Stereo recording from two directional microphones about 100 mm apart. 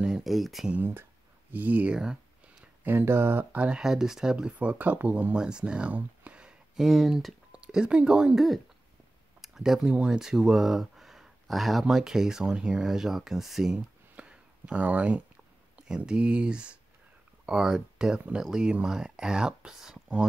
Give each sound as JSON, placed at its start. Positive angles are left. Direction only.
{"t": 0.0, "sound": "speech", "side_deg": -5}
{"t": 0.7, "sound": "speech", "side_deg": -20}
{"t": 1.5, "sound": "a sound", "side_deg": -15}
{"t": 2.8, "sound": "speech", "side_deg": -20}